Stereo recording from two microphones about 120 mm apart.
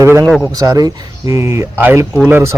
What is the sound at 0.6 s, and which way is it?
Speech, 30° right (ahead or behind).